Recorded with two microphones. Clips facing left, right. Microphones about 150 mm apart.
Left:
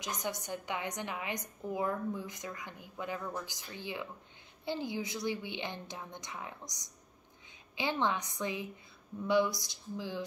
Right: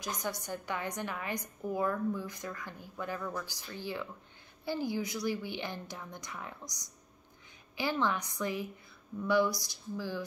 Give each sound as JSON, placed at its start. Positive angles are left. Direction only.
{"t": 0.0, "sound": "a woman's voice", "side_deg": 20}